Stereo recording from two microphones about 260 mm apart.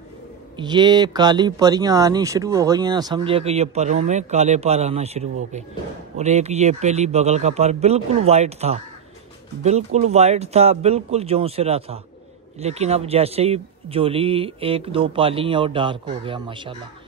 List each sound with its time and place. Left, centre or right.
0.6 s speech: centre